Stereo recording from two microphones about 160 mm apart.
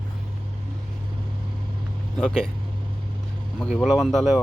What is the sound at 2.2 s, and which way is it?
Speech, 5° left (ahead or behind).